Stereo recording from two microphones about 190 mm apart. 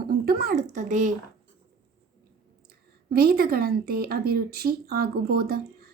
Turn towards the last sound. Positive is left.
turn(degrees=-50)  # may be behind; listen again after turning